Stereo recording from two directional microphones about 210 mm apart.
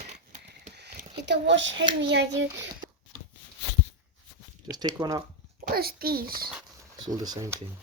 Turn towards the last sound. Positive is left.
turn(degrees=-15)  # may be behind; listen again after turning